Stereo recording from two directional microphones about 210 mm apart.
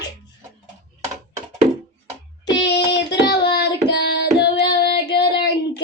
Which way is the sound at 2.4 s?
55° left (ahead or behind).